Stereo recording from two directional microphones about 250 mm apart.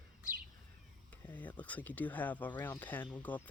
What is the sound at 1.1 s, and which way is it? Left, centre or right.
Speech, centre.